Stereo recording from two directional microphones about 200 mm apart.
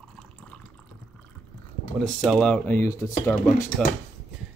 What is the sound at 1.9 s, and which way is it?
Speech, centre (ahead or behind).